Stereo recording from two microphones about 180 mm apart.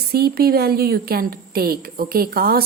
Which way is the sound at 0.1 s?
60° right (ahead or behind).